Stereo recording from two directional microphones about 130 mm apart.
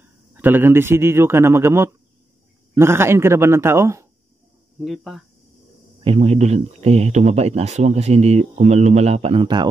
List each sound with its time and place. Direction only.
0.3 s a man's voice: 15° right (ahead or behind)
4.8 s speech: centre (ahead or behind)
6.0 s speech: 50° right (ahead or behind)